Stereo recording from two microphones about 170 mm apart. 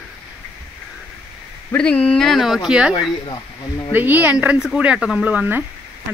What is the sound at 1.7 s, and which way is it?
Speech, 5° left (ahead or behind).